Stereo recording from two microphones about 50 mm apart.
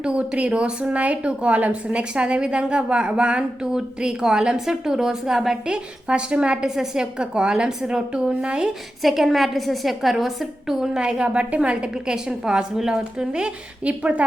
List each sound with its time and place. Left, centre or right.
0.0 s speech: right
5.6 s a woman's voice: centre
9.0 s a woman's voice: centre; by 14.3 s right